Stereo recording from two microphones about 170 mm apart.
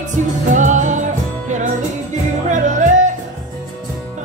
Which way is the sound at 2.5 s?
45° right (ahead or behind).